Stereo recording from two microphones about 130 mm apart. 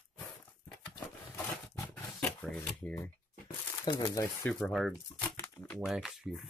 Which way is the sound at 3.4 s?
35° left (ahead or behind).